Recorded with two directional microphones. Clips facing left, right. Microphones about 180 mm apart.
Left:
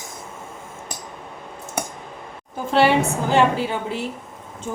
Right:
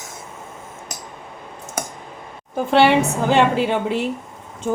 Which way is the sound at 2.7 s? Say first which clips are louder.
Right 2 dB; 65° right (ahead or behind).